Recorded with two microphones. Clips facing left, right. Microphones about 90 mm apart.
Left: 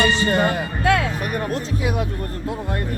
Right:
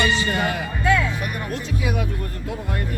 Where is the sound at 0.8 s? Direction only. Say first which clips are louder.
Left 1 dB; 60° left (ahead or behind).